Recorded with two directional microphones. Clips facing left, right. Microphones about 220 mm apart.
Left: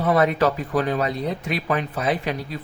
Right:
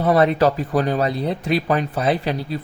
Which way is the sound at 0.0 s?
35° right (ahead or behind).